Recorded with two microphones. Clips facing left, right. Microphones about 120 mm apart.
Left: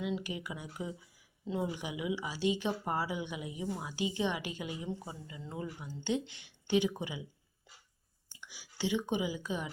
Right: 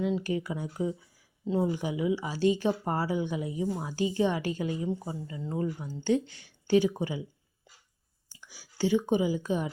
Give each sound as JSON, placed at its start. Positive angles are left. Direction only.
{"t": 0.0, "sound": "speech", "side_deg": -40}
{"t": 6.2, "sound": "speech", "side_deg": 25}
{"t": 6.7, "sound": "speech", "side_deg": -40}
{"t": 8.3, "sound": "speech", "side_deg": -40}